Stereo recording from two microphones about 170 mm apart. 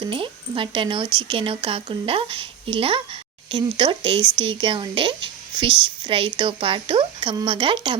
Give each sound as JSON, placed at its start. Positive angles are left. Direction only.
{"t": 0.1, "sound": "speech", "side_deg": -30}